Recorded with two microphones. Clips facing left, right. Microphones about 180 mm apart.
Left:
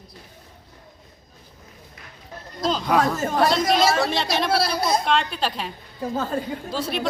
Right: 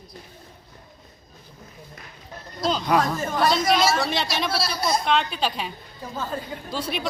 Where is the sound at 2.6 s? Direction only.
Centre (ahead or behind).